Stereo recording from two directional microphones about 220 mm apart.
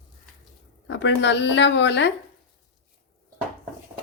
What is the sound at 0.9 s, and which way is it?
Speech, 55° left (ahead or behind).